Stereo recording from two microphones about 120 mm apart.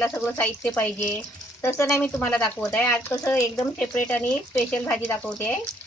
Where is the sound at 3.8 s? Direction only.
10° left (ahead or behind).